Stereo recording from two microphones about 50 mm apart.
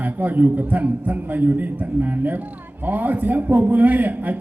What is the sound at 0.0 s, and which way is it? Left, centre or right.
A man's voice, right.